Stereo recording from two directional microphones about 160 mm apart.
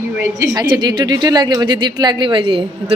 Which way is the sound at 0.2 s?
20° right (ahead or behind).